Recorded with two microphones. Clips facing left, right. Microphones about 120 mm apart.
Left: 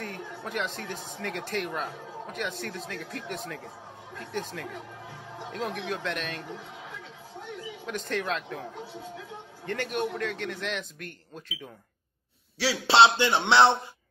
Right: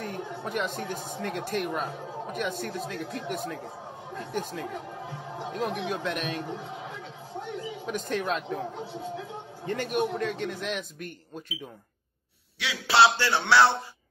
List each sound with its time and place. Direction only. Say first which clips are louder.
0.0 s a woman's voice: right 3 dB; 15° right (ahead or behind)
7.8 s a man's voice: right 1 dB; 10° right (ahead or behind)
9.7 s a man's voice: right 2 dB; 15° right (ahead or behind)
12.5 s a man's voice: left 2 dB; 30° left (ahead or behind)